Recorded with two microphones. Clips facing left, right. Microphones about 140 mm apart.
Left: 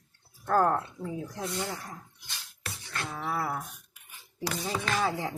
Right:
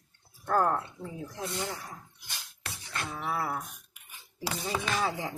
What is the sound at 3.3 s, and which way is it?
Speech, centre (ahead or behind).